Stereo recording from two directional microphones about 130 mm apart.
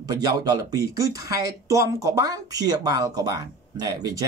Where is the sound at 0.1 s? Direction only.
30° right (ahead or behind).